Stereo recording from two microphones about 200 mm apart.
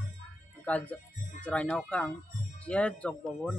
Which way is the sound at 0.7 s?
5° left (ahead or behind).